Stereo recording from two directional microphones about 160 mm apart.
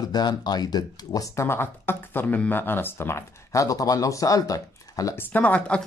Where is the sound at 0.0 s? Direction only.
25° left (ahead or behind).